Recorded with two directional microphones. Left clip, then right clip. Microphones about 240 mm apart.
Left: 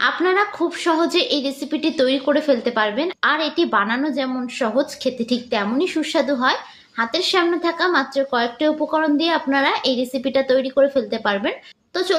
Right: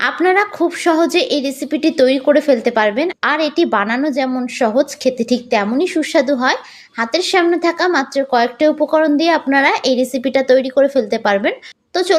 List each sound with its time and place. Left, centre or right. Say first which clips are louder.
0.0 s a woman's voice: right 4 dB; right